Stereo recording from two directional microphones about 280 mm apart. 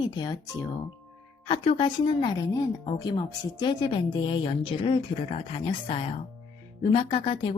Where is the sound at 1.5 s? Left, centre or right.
Centre.